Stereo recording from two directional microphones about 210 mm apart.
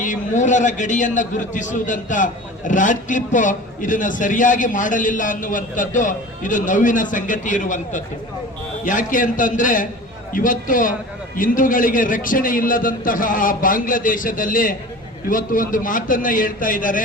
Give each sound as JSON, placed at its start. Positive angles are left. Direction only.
{"t": 0.0, "sound": "a man's voice", "side_deg": 35}